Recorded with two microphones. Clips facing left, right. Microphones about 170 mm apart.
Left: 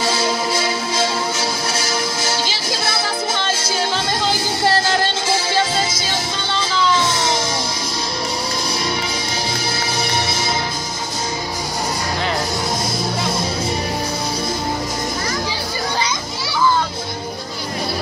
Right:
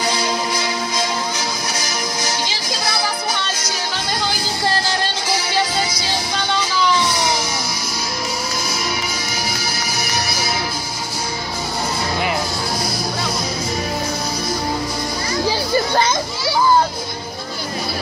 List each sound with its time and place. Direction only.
0.0 s music: 25° left (ahead or behind)
5.3 s music: 25° left (ahead or behind)
16.0 s children playing: 45° right (ahead or behind)